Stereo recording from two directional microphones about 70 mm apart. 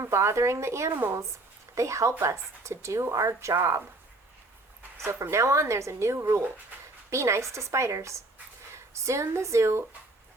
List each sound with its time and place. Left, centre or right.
0.0 s speech: right
4.9 s speech: right